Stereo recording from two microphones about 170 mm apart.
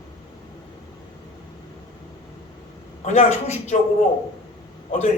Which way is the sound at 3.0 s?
40° left (ahead or behind).